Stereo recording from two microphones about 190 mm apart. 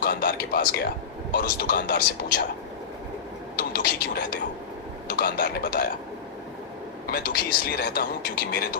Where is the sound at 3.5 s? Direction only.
50° left (ahead or behind).